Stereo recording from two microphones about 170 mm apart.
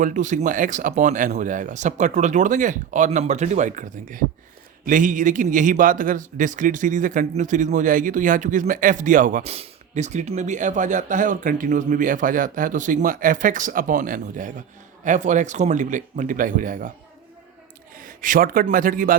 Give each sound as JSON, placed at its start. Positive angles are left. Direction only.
{"t": 0.0, "sound": "speech", "side_deg": -45}
{"t": 17.9, "sound": "a man's voice", "side_deg": -55}